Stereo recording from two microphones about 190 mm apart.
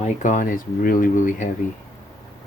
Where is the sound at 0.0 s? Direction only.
40° left (ahead or behind).